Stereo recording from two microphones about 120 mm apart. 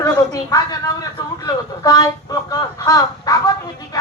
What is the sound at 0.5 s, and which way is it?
A woman's voice, 30° left (ahead or behind).